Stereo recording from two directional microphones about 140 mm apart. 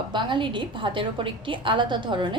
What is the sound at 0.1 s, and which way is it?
A woman's voice, 35° right (ahead or behind).